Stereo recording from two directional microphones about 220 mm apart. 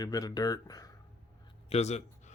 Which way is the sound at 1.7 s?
30° left (ahead or behind).